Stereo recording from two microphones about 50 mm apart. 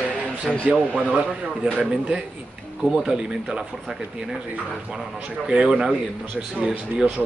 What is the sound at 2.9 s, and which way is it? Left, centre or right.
Speech, centre.